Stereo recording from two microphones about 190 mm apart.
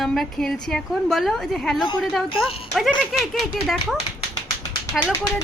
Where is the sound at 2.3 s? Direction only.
30° left (ahead or behind).